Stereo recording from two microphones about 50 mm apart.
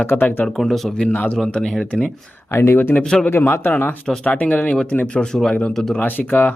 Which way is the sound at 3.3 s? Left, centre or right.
Left.